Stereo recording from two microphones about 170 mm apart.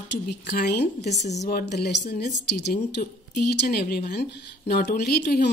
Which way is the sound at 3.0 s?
65° left (ahead or behind).